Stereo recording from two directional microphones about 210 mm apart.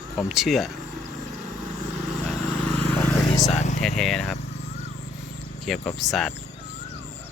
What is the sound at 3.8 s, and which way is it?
Speech, centre (ahead or behind).